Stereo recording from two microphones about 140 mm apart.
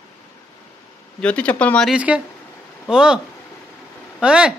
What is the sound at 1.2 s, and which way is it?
Speech, 10° left (ahead or behind).